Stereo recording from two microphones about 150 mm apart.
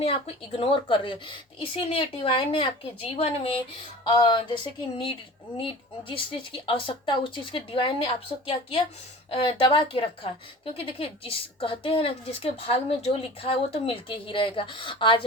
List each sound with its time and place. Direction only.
0.0 s speech: 40° left (ahead or behind)